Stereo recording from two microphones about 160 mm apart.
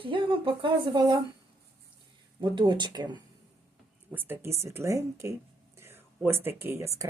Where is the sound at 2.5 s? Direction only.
30° right (ahead or behind).